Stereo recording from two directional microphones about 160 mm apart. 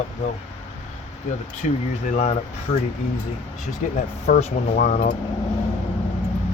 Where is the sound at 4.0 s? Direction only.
50° left (ahead or behind).